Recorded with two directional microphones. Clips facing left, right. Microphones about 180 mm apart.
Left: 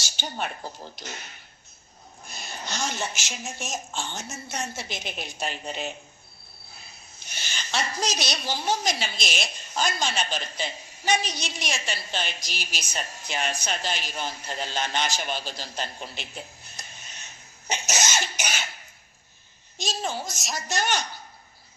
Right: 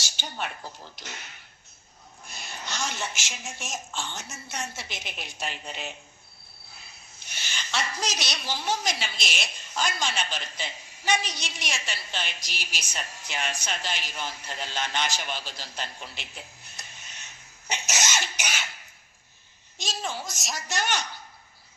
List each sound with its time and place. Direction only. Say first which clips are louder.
0.2 s a woman's voice: left 3 dB; 40° left (ahead or behind)
2.2 s a woman's voice: left 2 dB; 40° left (ahead or behind)
7.3 s a woman's voice: left 2 dB; 40° left (ahead or behind)
17.7 s cough: left 2 dB; 40° left (ahead or behind)
19.8 s a woman's voice: left 3 dB; 40° left (ahead or behind)